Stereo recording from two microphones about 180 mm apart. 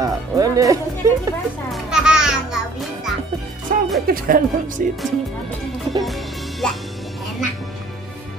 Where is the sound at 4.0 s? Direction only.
50° right (ahead or behind).